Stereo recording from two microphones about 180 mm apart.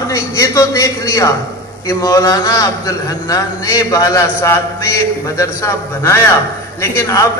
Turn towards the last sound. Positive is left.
turn(degrees=15)  # may be behind; listen again after turning